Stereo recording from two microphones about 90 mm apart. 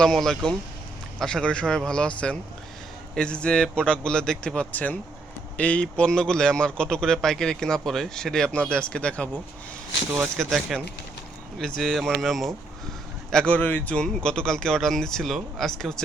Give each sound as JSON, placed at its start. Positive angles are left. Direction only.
{"t": 0.0, "sound": "a man's voice", "side_deg": 5}
{"t": 10.4, "sound": "speech", "side_deg": 0}
{"t": 11.8, "sound": "speech", "side_deg": 5}
{"t": 13.3, "sound": "a man's voice", "side_deg": 15}
{"t": 13.9, "sound": "speech", "side_deg": 10}